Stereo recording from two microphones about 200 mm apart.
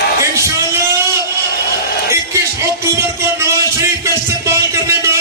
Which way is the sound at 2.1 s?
15° right (ahead or behind).